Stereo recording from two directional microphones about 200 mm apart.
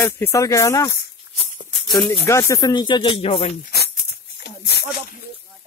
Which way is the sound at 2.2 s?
15° left (ahead or behind).